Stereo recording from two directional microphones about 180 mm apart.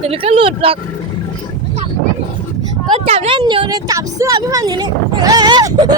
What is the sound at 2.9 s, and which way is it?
Speech, 35° right (ahead or behind).